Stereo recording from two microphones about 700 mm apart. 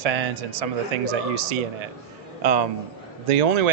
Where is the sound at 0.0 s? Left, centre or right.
Right.